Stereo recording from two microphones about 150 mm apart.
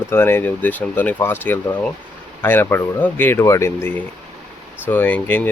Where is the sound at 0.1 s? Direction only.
15° left (ahead or behind).